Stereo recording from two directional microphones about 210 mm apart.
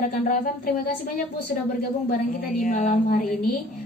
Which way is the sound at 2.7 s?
40° left (ahead or behind).